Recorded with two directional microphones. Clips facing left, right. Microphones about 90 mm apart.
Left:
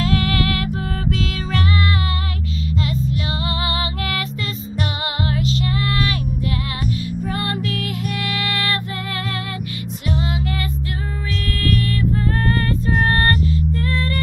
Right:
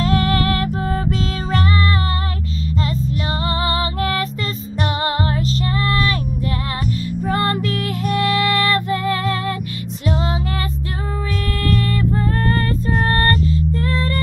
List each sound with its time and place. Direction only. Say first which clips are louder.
0.0 s music: right 2 dB; 35° right (ahead or behind)
3.4 s music: right 3 dB; 35° right (ahead or behind)
7.2 s music: right 7 dB; 45° right (ahead or behind)
13.7 s music: right 2 dB; 35° right (ahead or behind)